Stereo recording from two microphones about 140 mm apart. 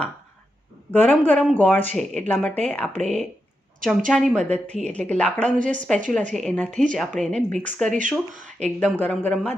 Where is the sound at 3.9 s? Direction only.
Centre (ahead or behind).